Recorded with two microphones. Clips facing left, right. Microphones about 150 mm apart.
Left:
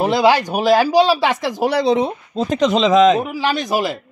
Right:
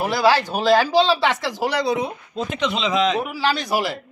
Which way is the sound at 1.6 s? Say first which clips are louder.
Left 6 dB; 25° left (ahead or behind).